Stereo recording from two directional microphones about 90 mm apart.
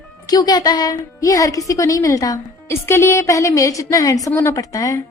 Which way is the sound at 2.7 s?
25° left (ahead or behind).